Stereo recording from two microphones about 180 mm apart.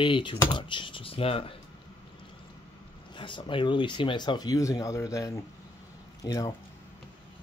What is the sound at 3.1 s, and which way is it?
Speech, 25° left (ahead or behind).